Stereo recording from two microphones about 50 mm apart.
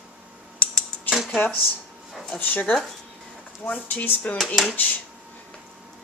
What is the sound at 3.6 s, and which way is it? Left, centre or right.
Speech, centre.